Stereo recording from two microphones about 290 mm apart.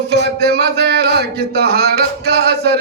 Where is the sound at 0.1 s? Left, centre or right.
Right.